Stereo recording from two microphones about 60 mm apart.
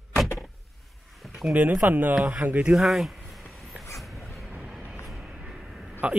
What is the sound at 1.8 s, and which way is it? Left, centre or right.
Speech, right.